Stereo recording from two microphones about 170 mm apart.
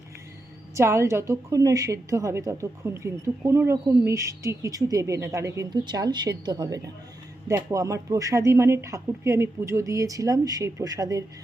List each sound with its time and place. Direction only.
0.8 s a woman's voice: 15° right (ahead or behind)